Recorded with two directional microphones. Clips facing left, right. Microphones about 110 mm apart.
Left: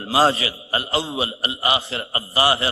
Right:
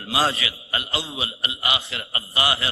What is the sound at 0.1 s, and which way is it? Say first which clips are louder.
A man's voice: left 5 dB; 30° left (ahead or behind).